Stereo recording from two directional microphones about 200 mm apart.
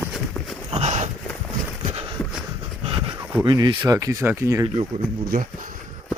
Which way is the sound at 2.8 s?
25° right (ahead or behind).